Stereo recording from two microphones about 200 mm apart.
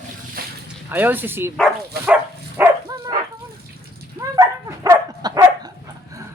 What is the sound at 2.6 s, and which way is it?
Dog, 20° right (ahead or behind).